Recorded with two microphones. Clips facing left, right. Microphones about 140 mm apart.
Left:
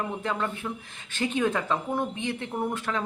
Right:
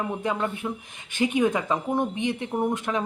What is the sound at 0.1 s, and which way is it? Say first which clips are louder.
Speech: right 3 dB; 15° right (ahead or behind).